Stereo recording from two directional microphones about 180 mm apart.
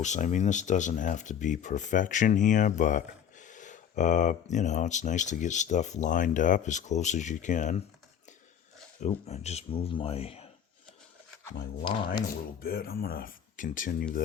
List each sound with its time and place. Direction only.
0.0 s speech: 40° left (ahead or behind)
9.0 s speech: 35° left (ahead or behind)
11.8 s speech: 25° left (ahead or behind)
12.6 s speech: 55° left (ahead or behind)